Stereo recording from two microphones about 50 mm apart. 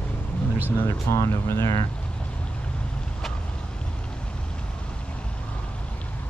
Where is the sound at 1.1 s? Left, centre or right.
Left.